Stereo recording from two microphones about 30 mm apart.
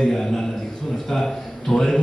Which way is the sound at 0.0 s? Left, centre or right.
Centre.